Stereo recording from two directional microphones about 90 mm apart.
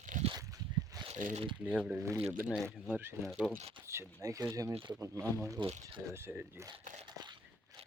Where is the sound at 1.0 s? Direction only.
90° right.